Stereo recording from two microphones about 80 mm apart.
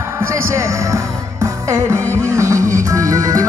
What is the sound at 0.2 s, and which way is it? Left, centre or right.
Music, right.